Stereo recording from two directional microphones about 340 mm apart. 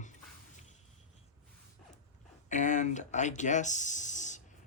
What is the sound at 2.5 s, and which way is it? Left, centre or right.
Speech, left.